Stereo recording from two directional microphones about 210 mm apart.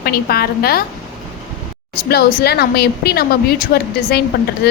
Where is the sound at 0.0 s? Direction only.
45° left (ahead or behind).